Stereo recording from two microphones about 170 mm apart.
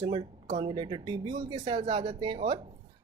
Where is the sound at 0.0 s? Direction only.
30° right (ahead or behind).